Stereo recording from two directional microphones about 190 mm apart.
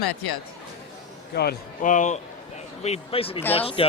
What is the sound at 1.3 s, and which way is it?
A man's voice, 55° left (ahead or behind).